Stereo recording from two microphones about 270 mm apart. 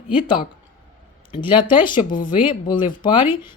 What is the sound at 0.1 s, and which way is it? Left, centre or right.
Speech, centre.